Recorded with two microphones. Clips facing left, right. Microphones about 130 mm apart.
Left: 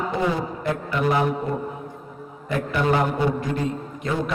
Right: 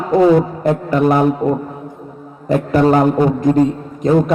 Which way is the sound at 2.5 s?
40° right (ahead or behind).